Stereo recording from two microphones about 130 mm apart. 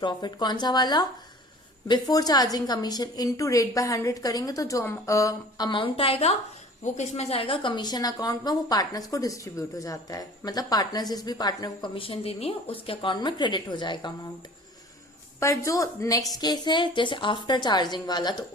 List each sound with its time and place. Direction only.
0.0 s a woman's voice: 35° left (ahead or behind); by 6.3 s 50° left (ahead or behind)
6.8 s a woman's voice: 65° left (ahead or behind); by 14.1 s 35° left (ahead or behind)
15.4 s a woman's voice: 25° left (ahead or behind)